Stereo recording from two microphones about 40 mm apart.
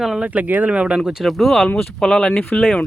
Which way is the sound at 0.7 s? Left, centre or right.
Right.